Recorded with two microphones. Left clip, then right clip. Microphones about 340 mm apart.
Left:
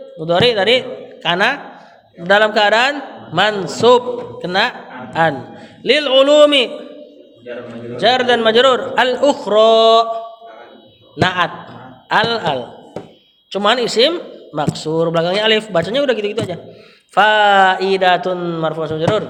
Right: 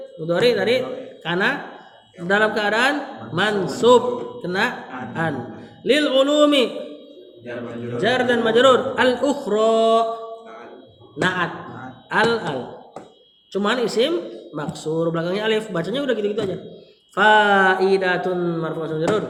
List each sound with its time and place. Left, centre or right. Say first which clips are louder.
0.3 s a man's voice: left 5 dB; left
7.9 s a man's voice: left 6 dB; left
11.2 s a man's voice: left 6 dB; left
13.5 s a man's voice: left 6 dB; left